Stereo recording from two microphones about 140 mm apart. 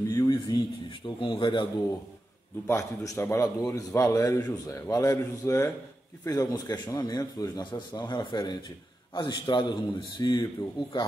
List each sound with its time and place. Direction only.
0.1 s a man's voice: 25° left (ahead or behind)
2.6 s a man's voice: 20° left (ahead or behind)